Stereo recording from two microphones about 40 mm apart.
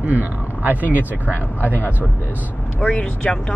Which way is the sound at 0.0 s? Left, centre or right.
Right.